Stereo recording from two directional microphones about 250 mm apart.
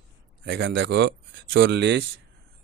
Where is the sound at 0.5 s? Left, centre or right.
Right.